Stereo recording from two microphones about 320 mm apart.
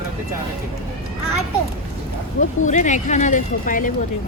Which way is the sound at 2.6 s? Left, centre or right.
Left.